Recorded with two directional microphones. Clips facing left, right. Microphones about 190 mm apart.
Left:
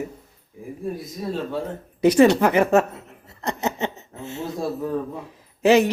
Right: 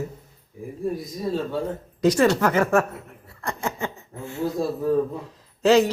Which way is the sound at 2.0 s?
10° left (ahead or behind).